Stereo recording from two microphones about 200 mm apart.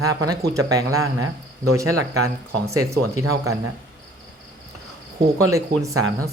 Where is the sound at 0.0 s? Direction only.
15° right (ahead or behind).